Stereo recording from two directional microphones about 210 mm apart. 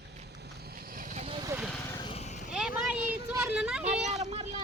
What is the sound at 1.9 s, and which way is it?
Vehicle, 20° left (ahead or behind).